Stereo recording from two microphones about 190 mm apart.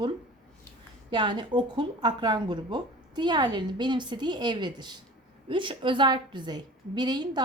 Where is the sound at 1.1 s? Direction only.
25° right (ahead or behind).